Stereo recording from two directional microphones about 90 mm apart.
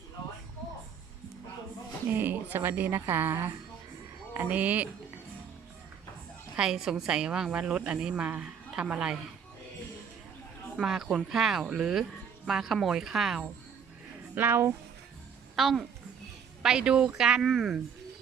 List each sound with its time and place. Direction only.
2.0 s a woman's voice: 20° right (ahead or behind)
6.6 s a woman's voice: 5° right (ahead or behind)
10.8 s speech: 5° right (ahead or behind)
14.3 s a woman's voice: 25° right (ahead or behind)
15.5 s a woman's voice: centre (ahead or behind)